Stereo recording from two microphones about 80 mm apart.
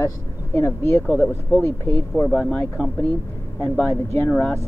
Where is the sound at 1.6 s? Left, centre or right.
Left.